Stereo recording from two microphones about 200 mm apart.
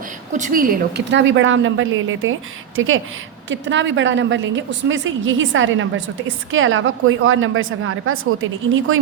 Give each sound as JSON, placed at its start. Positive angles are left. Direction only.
{"t": 0.3, "sound": "a woman's voice", "side_deg": -40}
{"t": 1.1, "sound": "a woman's voice", "side_deg": -70}
{"t": 3.5, "sound": "a woman's voice", "side_deg": -65}